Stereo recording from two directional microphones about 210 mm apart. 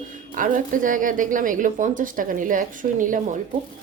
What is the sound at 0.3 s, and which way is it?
Speech, 40° right (ahead or behind).